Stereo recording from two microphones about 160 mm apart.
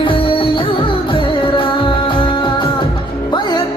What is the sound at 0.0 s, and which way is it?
Music, 30° left (ahead or behind).